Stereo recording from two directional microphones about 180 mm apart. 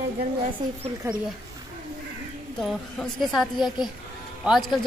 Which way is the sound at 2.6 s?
Centre (ahead or behind).